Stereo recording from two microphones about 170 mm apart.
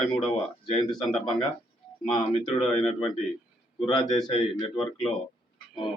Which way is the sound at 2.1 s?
30° left (ahead or behind).